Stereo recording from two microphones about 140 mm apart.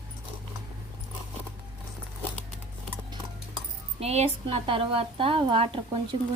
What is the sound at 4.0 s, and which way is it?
A woman's voice, 50° right (ahead or behind).